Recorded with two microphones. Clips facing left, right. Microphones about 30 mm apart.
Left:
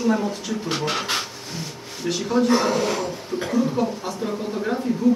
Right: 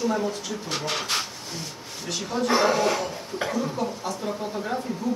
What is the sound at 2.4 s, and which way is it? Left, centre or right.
A man's voice, centre.